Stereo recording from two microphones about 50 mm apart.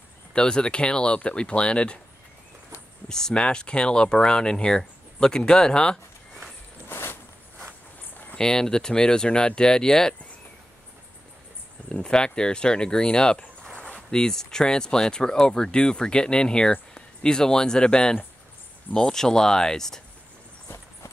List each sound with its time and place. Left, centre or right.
0.3 s speech: centre
3.1 s speech: centre
6.9 s a sound: left
8.4 s speech: centre
11.9 s speech: centre
20.6 s horse: left